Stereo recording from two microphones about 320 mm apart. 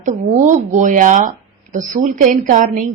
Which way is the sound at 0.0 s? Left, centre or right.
Right.